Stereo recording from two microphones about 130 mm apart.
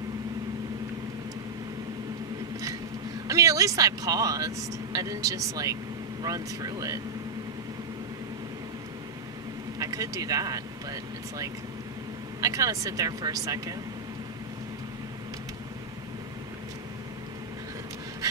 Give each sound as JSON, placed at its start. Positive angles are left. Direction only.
{"t": 3.3, "sound": "speech", "side_deg": -25}
{"t": 9.8, "sound": "speech", "side_deg": -25}